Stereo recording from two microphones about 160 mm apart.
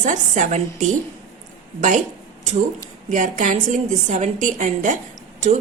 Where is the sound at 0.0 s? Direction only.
50° right (ahead or behind).